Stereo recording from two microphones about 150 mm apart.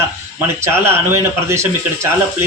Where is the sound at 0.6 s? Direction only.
15° right (ahead or behind).